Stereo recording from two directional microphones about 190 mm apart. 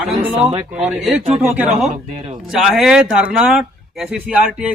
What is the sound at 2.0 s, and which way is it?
Speech, 30° right (ahead or behind).